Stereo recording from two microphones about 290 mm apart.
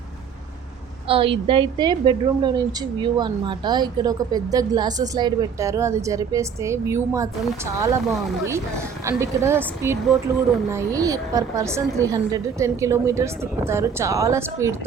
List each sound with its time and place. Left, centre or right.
1.0 s a woman's voice: centre
8.0 s a woman's voice: centre